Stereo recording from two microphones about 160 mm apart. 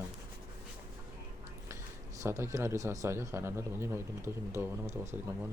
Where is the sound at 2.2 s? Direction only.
15° right (ahead or behind).